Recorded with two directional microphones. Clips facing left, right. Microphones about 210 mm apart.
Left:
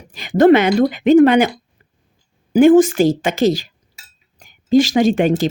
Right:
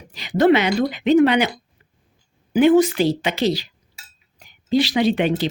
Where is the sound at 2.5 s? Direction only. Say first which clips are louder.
Left 5 dB; 45° left (ahead or behind).